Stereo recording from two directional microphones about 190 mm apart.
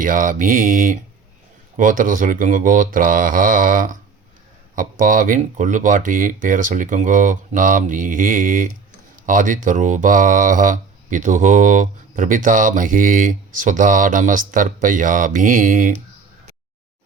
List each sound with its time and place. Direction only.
0.0 s speech: 45° right (ahead or behind)